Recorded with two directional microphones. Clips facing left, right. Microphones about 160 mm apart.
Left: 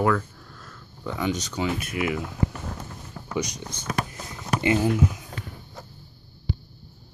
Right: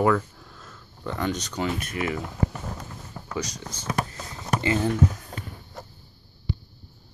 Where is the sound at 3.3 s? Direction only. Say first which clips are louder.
Left 3 dB; 20° left (ahead or behind).